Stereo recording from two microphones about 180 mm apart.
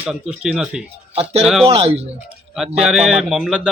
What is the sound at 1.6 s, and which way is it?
Speech, 35° right (ahead or behind).